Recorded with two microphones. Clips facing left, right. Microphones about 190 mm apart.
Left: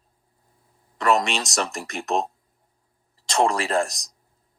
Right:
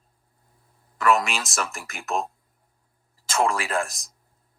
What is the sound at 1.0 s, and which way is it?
Speech, 35° left (ahead or behind).